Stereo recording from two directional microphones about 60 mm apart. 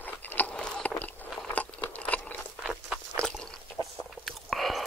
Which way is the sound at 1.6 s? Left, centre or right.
Left.